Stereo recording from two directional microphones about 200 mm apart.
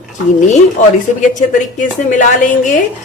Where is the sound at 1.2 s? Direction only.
40° left (ahead or behind).